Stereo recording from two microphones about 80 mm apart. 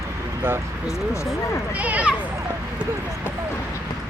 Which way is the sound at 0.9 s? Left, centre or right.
Left.